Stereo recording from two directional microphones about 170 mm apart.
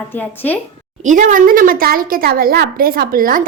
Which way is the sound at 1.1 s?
50° right (ahead or behind).